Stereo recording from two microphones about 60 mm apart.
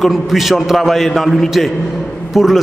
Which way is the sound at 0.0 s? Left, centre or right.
Centre.